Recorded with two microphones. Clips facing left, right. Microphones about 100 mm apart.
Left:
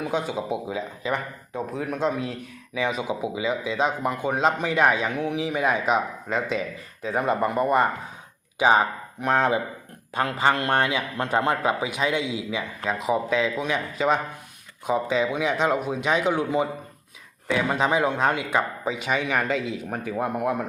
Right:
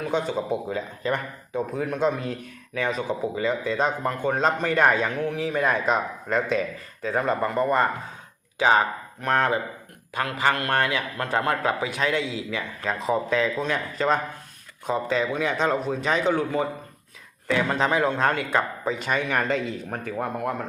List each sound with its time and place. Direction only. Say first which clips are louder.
0.0 s speech: right 1 dB; 10° left (ahead or behind)
7.2 s speech: left 1 dB; 15° left (ahead or behind)
10.2 s a man's voice: left 2 dB; 25° left (ahead or behind)
13.1 s speech: even; 5° left (ahead or behind)